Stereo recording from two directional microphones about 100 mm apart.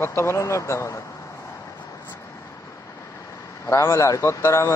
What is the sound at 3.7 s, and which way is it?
Speech, 30° left (ahead or behind).